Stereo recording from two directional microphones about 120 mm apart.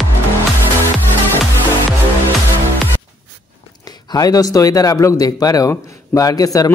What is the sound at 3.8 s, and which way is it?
A man's voice, 35° left (ahead or behind).